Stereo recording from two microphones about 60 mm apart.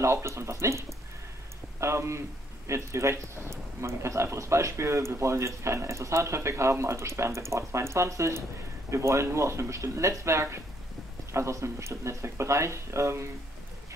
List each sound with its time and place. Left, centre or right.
0.0 s a man's voice: right